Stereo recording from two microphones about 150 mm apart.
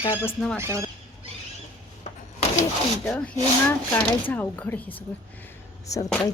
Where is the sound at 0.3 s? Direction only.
5° left (ahead or behind).